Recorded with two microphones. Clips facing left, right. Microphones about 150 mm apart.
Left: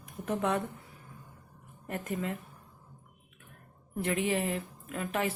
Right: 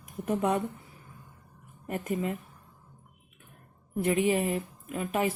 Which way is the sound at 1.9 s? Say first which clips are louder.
Right 4 dB; 15° right (ahead or behind).